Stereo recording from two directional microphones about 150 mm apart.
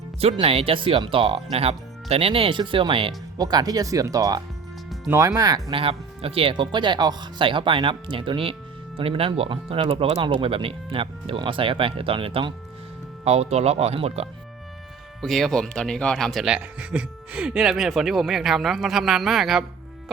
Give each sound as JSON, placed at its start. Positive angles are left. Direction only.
{"t": 0.2, "sound": "speech", "side_deg": -40}
{"t": 5.7, "sound": "speech", "side_deg": -40}
{"t": 15.2, "sound": "speech", "side_deg": 0}